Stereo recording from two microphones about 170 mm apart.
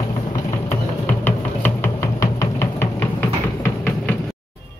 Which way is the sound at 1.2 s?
15° left (ahead or behind).